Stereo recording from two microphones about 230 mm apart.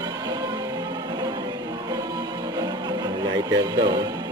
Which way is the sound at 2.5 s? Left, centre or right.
Centre.